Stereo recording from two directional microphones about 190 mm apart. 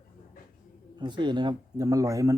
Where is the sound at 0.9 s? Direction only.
25° right (ahead or behind).